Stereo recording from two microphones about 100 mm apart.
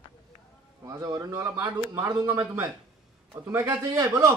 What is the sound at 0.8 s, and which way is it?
Speech, 35° right (ahead or behind).